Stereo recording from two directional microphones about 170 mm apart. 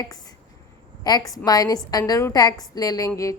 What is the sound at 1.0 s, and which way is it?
A woman's voice, 20° left (ahead or behind).